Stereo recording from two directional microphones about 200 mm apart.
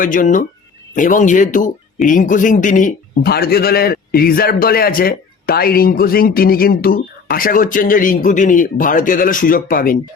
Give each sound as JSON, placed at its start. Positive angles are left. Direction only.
{"t": 0.0, "sound": "a man's voice", "side_deg": 40}